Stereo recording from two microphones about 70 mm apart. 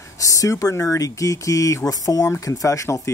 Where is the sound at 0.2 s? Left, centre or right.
Left.